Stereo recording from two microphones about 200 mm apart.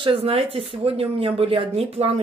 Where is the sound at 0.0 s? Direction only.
25° right (ahead or behind).